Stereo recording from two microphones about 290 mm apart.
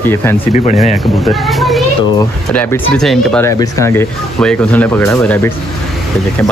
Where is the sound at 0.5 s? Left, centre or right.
Left.